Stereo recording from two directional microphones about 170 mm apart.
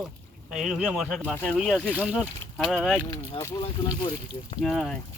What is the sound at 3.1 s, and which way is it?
Speech, 25° left (ahead or behind).